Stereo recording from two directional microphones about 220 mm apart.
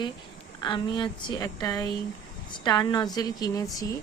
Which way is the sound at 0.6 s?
20° left (ahead or behind).